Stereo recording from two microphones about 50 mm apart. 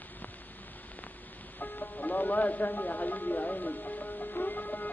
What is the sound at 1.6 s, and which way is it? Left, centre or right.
Music, left.